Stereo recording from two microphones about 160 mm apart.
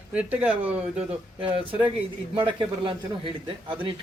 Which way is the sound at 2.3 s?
30° right (ahead or behind).